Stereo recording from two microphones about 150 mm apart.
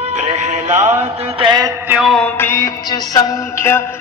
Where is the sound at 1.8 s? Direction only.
5° right (ahead or behind).